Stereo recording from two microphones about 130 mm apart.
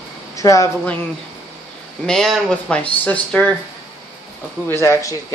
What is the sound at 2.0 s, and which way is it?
Speech, 5° left (ahead or behind).